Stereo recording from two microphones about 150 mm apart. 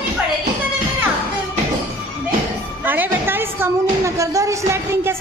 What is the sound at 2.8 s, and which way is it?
A woman's voice, 10° right (ahead or behind).